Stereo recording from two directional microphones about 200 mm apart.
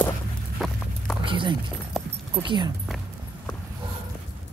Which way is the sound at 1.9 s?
Centre (ahead or behind).